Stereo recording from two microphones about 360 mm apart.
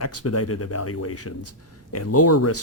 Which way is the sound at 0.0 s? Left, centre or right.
Left.